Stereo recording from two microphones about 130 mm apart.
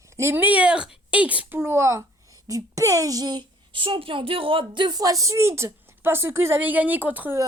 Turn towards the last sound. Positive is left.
turn(degrees=-15)  # may be behind; listen again after turning